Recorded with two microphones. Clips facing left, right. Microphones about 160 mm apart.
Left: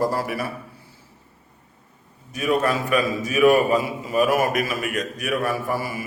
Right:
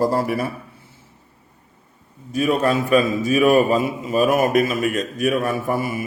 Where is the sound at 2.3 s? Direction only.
25° right (ahead or behind).